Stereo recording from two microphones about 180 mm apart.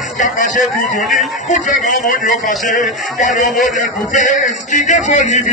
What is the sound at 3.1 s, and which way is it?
Music, 45° left (ahead or behind).